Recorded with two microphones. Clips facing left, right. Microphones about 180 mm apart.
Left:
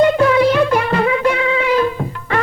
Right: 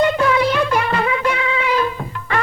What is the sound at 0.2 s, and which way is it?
Music, 45° left (ahead or behind).